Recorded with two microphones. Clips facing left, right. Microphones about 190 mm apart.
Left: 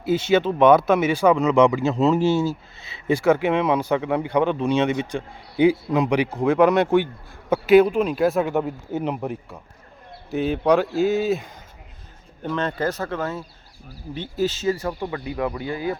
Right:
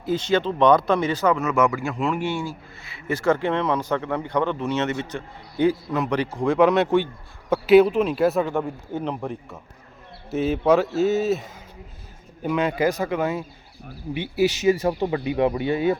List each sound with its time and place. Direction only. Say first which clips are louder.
0.0 s a man's voice: left 3 dB; 10° left (ahead or behind)
8.4 s speech: left 2 dB; 10° left (ahead or behind)
10.2 s a man's voice: even; centre (ahead or behind); by 16.0 s 25° right (ahead or behind)